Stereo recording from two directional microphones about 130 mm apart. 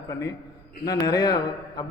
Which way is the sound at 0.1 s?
25° left (ahead or behind).